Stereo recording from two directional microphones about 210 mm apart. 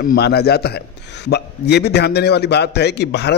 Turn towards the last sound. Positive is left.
turn(degrees=55)  # may be behind; listen again after turning